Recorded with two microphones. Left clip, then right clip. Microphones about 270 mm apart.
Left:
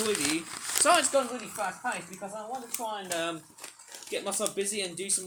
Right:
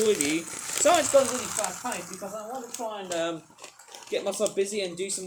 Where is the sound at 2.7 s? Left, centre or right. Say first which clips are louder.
Right 2 dB; left.